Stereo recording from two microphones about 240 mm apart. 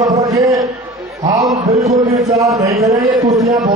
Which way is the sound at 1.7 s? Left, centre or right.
Right.